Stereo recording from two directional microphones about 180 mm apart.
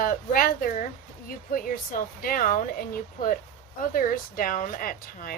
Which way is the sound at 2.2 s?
50° left (ahead or behind).